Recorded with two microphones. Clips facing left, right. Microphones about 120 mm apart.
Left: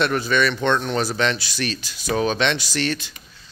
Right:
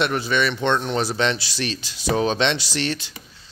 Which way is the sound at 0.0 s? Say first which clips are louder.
Left 1 dB; 20° right (ahead or behind).